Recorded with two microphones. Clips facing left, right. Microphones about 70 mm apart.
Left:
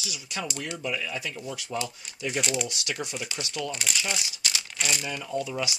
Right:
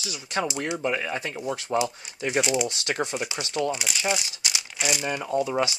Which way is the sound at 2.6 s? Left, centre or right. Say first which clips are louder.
Right 6 dB; right.